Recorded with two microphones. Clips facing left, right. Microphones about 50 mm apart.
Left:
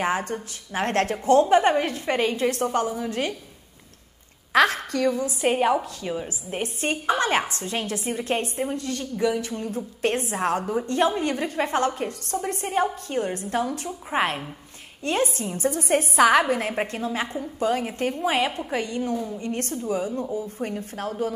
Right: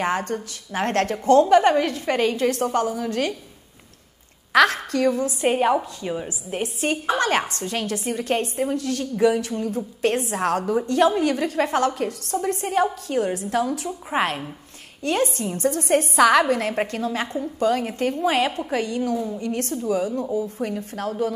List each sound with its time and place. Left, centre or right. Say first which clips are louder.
0.3 s a woman's voice: right 2 dB; left
1.1 s a woman's voice: right 3 dB; centre
4.5 s a woman's voice: right 2 dB; centre
7.2 s a woman's voice: right 2 dB; centre
8.2 s a woman's voice: right 3 dB; centre
9.1 s a sound: right 5 dB; centre
9.4 s a woman's voice: right 3 dB; centre
13.5 s a woman's voice: right 3 dB; centre
14.1 s a sound: right 1 dB; centre
15.0 s a woman's voice: right 2 dB; centre
16.9 s a woman's voice: right 2 dB; left
17.6 s a woman's voice: right 2 dB; centre
19.1 s a woman's voice: right 3 dB; centre
20.6 s a woman's voice: right 3 dB; centre